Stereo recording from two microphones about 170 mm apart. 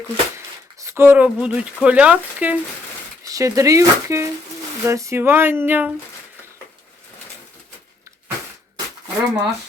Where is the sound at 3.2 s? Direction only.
20° right (ahead or behind).